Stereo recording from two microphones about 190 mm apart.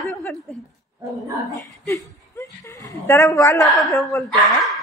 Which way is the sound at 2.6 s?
15° left (ahead or behind).